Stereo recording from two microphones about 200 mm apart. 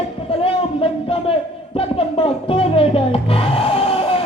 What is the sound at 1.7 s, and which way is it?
Speech, 30° left (ahead or behind).